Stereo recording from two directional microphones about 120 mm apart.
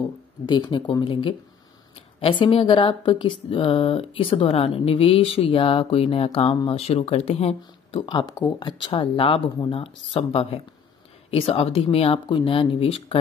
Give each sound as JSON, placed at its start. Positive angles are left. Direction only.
{"t": 0.5, "sound": "speech", "side_deg": 40}
{"t": 8.1, "sound": "speech", "side_deg": 35}
{"t": 8.6, "sound": "speech", "side_deg": 45}